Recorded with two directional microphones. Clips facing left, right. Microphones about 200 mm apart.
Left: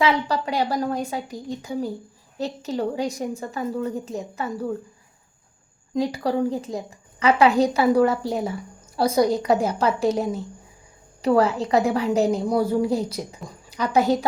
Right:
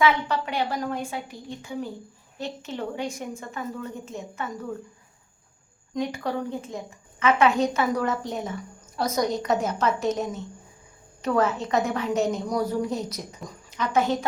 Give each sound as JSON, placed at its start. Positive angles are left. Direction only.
{"t": 0.0, "sound": "a woman's voice", "side_deg": 35}
{"t": 5.9, "sound": "a woman's voice", "side_deg": 35}